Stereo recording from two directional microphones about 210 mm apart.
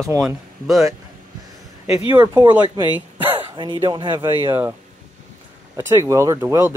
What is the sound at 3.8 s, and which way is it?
Speech, 20° right (ahead or behind).